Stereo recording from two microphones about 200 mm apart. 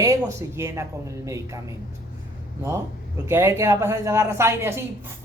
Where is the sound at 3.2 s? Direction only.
15° right (ahead or behind).